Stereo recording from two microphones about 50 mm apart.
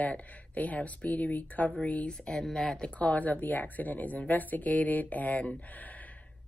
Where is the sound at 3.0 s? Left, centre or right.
Left.